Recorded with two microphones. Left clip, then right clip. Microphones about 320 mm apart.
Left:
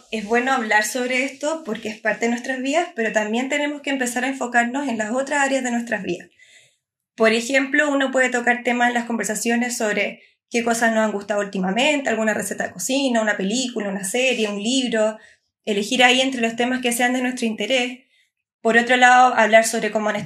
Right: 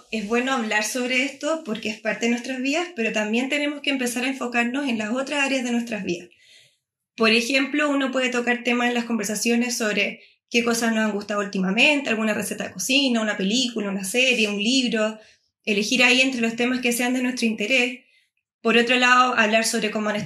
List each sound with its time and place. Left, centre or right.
0.1 s speech: left